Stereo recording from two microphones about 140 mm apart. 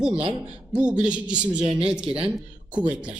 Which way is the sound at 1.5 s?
40° right (ahead or behind).